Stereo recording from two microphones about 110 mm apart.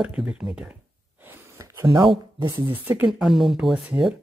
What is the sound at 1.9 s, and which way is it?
Speech, 45° right (ahead or behind).